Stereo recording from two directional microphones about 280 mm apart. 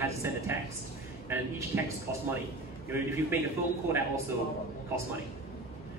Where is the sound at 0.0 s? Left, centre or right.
Centre.